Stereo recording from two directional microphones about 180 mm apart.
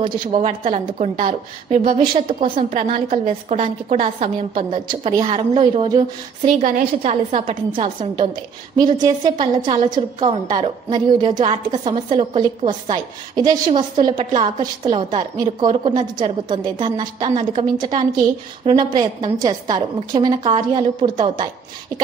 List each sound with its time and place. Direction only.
0.0 s a woman's voice: 30° right (ahead or behind)
2.5 s a woman's voice: 45° right (ahead or behind); by 6.5 s 25° right (ahead or behind)
7.0 s a woman's voice: 40° right (ahead or behind)
17.4 s a woman's voice: 35° right (ahead or behind)
17.7 s a woman's voice: 25° right (ahead or behind)